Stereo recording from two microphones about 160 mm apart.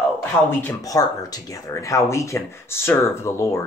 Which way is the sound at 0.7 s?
20° left (ahead or behind).